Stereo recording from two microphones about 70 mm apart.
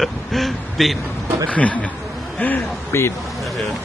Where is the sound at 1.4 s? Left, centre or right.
Left.